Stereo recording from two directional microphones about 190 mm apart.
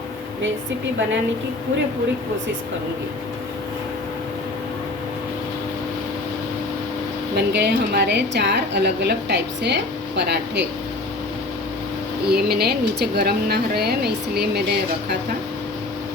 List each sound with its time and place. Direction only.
7.3 s a woman's voice: 60° right (ahead or behind)
12.3 s a woman's voice: 55° right (ahead or behind)